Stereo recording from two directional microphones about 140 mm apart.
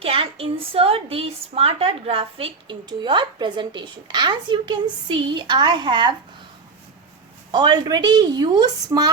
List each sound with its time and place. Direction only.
0.0 s a woman's voice: 40° right (ahead or behind)
7.5 s a woman's voice: 30° right (ahead or behind)